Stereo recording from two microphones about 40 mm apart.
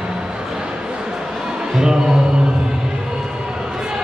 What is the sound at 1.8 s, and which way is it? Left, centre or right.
Music, centre.